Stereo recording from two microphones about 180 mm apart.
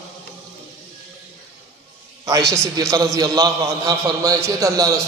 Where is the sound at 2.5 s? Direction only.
15° right (ahead or behind).